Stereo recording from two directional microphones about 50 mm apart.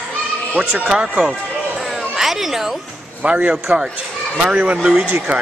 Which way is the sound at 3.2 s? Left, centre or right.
Right.